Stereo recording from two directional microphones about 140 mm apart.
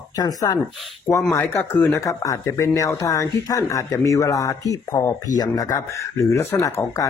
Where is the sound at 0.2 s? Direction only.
25° left (ahead or behind).